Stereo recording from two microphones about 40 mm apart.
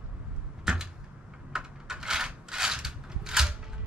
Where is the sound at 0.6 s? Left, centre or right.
Centre.